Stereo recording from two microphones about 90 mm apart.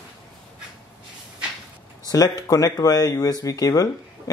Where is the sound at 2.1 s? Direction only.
45° left (ahead or behind).